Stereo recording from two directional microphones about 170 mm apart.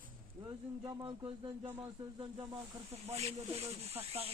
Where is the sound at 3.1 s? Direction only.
40° right (ahead or behind).